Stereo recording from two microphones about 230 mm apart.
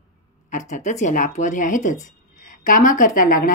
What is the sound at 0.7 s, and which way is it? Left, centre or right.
A woman's voice, left.